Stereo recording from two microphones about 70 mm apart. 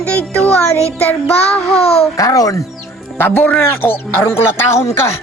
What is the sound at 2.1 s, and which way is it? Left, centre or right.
Speech, left.